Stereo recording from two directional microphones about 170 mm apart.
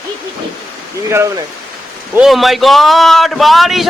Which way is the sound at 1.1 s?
15° right (ahead or behind).